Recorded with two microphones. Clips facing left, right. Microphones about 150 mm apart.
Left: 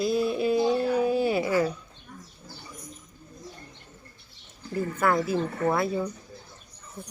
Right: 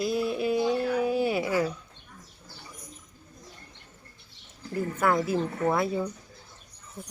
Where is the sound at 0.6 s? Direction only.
30° left (ahead or behind).